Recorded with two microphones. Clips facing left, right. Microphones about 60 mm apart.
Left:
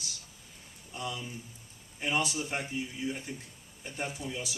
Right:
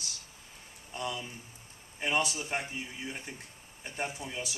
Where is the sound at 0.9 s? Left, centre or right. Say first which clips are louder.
Right 1 dB; right.